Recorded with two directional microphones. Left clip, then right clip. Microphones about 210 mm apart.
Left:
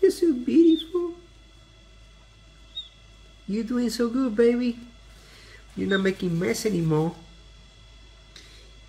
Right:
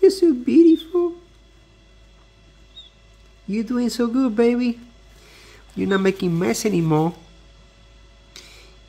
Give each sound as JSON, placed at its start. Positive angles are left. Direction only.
{"t": 0.0, "sound": "a sound", "side_deg": -45}
{"t": 3.4, "sound": "speech", "side_deg": -40}
{"t": 5.8, "sound": "speech", "side_deg": -50}